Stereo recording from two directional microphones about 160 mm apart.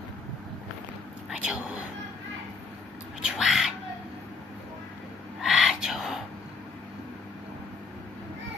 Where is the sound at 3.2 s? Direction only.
5° right (ahead or behind).